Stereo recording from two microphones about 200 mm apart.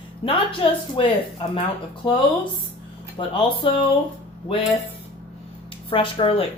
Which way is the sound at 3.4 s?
25° left (ahead or behind).